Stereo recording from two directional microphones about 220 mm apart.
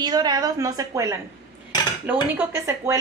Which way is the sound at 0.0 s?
20° right (ahead or behind).